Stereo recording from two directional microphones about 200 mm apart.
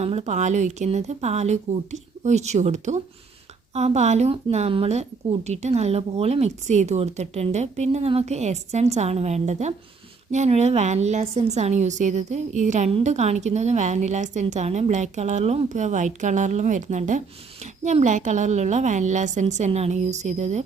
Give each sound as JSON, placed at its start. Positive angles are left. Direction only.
{"t": 0.0, "sound": "a woman's voice", "side_deg": -30}